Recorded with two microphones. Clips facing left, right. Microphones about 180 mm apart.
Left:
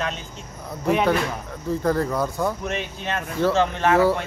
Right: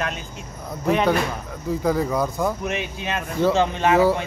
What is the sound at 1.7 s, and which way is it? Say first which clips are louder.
Speech: even; 10° right (ahead or behind).